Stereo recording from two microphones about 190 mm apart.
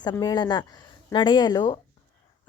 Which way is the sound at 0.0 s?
20° left (ahead or behind).